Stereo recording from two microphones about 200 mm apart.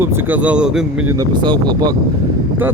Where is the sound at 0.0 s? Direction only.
10° right (ahead or behind).